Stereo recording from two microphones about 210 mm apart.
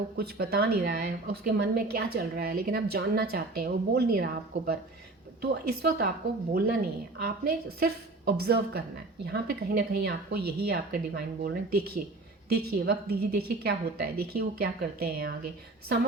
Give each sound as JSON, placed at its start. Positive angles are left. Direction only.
{"t": 0.2, "sound": "a woman's voice", "side_deg": -50}
{"t": 7.2, "sound": "a woman's voice", "side_deg": -45}